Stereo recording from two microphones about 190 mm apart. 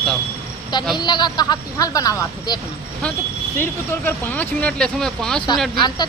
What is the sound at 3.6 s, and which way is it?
Speech, 10° left (ahead or behind).